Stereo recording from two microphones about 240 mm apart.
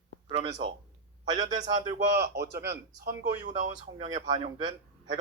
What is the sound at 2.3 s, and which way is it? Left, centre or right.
Speech, right.